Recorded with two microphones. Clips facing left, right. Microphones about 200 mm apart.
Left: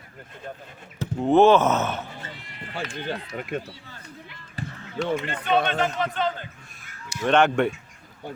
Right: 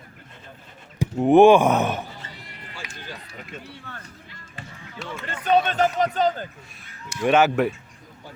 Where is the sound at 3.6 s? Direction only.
60° right (ahead or behind).